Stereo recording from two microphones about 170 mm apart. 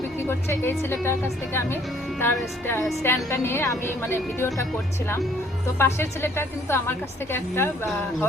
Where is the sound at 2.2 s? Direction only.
15° left (ahead or behind).